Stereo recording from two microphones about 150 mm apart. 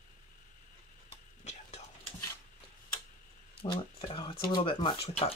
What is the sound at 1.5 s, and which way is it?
Whispering, 50° left (ahead or behind).